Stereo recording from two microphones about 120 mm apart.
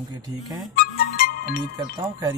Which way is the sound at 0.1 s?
35° right (ahead or behind).